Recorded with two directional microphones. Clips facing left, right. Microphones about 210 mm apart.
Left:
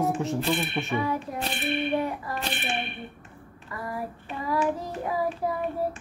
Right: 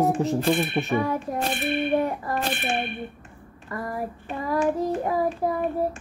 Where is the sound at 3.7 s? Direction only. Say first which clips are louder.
Right 5 dB; 50° right (ahead or behind).